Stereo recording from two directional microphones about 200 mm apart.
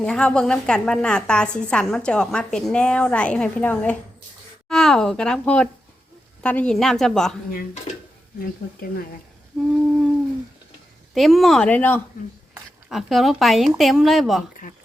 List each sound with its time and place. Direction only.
0.0 s a woman's voice: 5° left (ahead or behind)
7.9 s speech: 30° left (ahead or behind)
8.4 s speech: 45° left (ahead or behind)
9.5 s a woman's voice: centre (ahead or behind)
11.1 s a woman's voice: centre (ahead or behind)
14.6 s speech: 40° left (ahead or behind)